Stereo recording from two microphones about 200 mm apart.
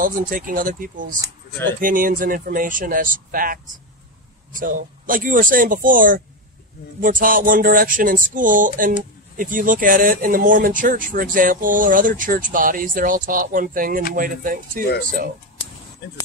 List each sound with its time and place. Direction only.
0.0 s speech: 45° right (ahead or behind)
4.6 s speech: 45° right (ahead or behind)